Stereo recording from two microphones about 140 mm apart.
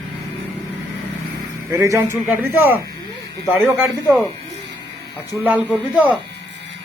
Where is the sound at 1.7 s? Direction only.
20° right (ahead or behind).